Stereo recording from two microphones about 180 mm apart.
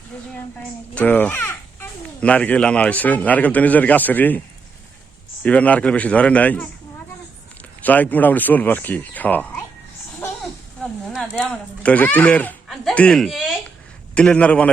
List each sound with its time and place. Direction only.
0.9 s speech: 10° left (ahead or behind)
5.4 s speech: 10° left (ahead or behind)
7.8 s speech: 10° left (ahead or behind)
10.8 s speech: centre (ahead or behind)